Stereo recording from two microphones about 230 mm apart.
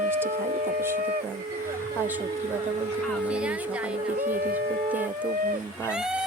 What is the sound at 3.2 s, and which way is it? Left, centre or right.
Speech, centre.